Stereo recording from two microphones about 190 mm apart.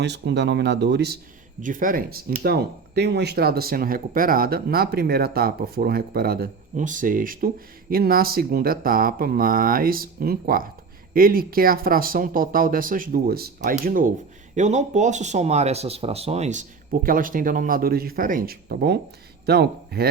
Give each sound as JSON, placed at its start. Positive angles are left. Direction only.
{"t": 0.0, "sound": "speech", "side_deg": -65}
{"t": 1.6, "sound": "speech", "side_deg": -45}